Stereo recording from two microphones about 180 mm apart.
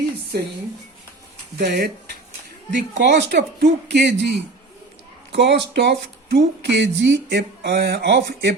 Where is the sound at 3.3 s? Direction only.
70° right (ahead or behind).